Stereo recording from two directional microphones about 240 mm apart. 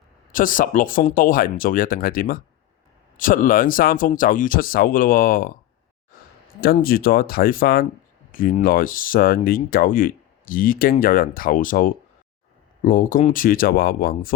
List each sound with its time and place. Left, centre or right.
0.3 s speech: left
6.6 s speech: left